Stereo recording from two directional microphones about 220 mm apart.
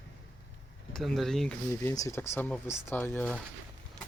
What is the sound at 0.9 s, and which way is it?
Speech, centre (ahead or behind).